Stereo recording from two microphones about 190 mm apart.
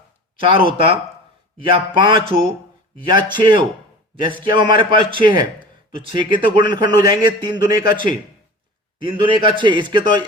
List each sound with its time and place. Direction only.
0.3 s a man's voice: 25° right (ahead or behind)